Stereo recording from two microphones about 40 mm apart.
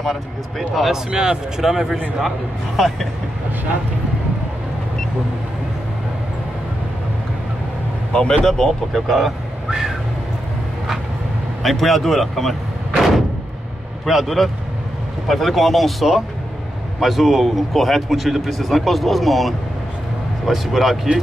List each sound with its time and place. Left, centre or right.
0.0 s speech: centre
0.9 s speech: centre
8.1 s speech: centre
8.5 s speech: centre
9.7 s speech: centre
11.6 s speech: centre
14.0 s speech: centre